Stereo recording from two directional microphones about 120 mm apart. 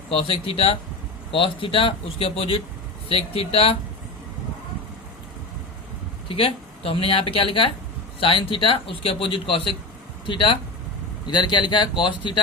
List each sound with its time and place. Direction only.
0.1 s a man's voice: 50° left (ahead or behind)
6.2 s a man's voice: 50° left (ahead or behind)